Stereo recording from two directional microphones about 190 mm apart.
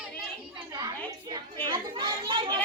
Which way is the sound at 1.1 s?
20° right (ahead or behind).